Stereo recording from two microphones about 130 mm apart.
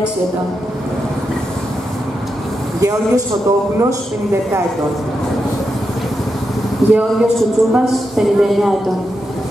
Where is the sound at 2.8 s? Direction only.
25° right (ahead or behind).